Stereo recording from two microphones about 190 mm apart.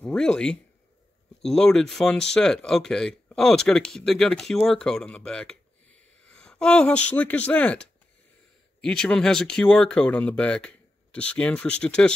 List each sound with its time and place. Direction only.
0.0 s speech: 5° left (ahead or behind)